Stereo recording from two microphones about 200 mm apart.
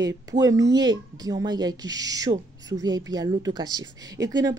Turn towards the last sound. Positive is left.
turn(degrees=-20)  # may be behind; listen again after turning